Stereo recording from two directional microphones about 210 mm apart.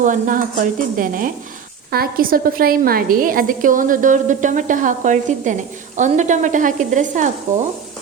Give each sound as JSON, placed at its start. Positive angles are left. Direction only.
{"t": 0.0, "sound": "a woman's voice", "side_deg": -40}